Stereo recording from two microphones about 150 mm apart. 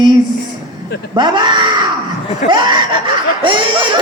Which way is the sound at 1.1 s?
30° right (ahead or behind).